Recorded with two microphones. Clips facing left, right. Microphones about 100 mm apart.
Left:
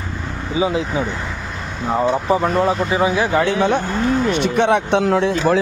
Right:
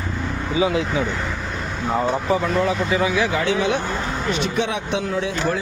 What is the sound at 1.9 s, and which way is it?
Speech, 15° left (ahead or behind).